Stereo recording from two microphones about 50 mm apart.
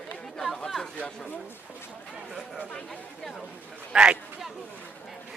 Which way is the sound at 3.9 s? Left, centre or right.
Centre.